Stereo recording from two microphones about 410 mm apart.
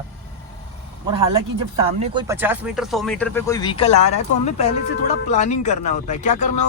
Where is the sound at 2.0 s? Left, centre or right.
Centre.